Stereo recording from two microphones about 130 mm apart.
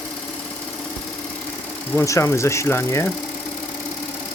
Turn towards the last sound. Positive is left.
turn(degrees=15)  # may be behind; listen again after turning